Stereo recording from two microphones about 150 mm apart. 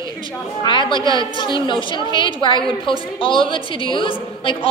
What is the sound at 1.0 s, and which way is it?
Speech, 25° right (ahead or behind).